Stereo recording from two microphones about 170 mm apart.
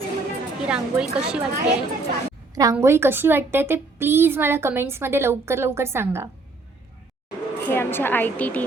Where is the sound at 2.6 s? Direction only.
15° right (ahead or behind).